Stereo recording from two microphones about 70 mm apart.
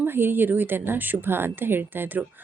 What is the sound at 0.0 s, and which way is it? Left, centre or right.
Speech, right.